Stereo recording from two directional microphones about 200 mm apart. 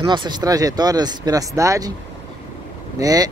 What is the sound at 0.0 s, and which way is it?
Speech, 20° right (ahead or behind).